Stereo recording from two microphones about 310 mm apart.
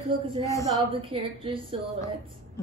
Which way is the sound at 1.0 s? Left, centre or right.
Centre.